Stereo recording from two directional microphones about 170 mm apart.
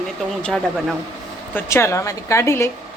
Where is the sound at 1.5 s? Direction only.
15° left (ahead or behind).